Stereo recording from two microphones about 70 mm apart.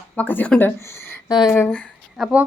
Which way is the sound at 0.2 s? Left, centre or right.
Left.